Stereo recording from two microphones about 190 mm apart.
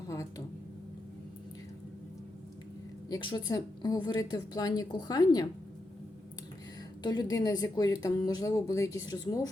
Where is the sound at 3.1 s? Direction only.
20° left (ahead or behind).